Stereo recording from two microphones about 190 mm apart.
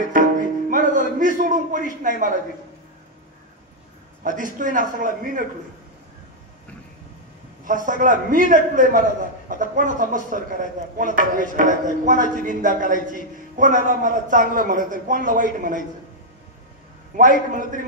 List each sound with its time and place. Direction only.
0.0 s music: 45° right (ahead or behind)
1.4 s a man's voice: 45° right (ahead or behind)
4.2 s speech: 45° right (ahead or behind)
7.6 s speech: 45° right (ahead or behind)
17.6 s speech: 45° right (ahead or behind)